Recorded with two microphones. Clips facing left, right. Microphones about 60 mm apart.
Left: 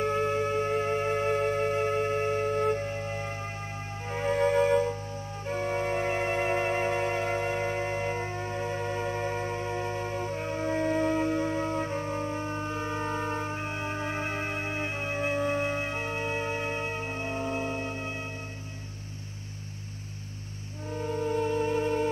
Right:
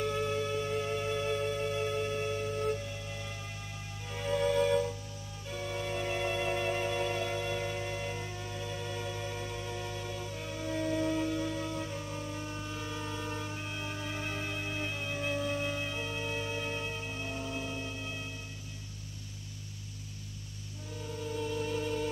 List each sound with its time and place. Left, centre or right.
0.0 s music: left
20.9 s music: left